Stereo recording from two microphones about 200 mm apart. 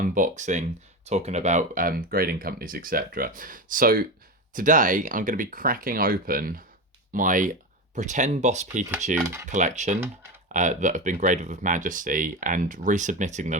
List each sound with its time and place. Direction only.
0.0 s speech: 40° right (ahead or behind)
9.2 s speech: 15° right (ahead or behind)
9.5 s speech: 35° right (ahead or behind)